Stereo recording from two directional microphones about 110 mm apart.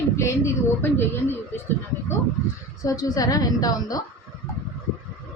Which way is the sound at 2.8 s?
35° left (ahead or behind).